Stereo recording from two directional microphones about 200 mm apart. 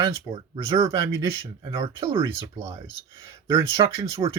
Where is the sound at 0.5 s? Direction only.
15° right (ahead or behind).